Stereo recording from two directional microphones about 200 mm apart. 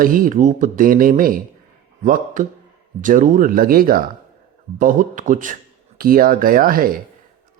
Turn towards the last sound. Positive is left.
turn(degrees=-45)  # may be behind; listen again after turning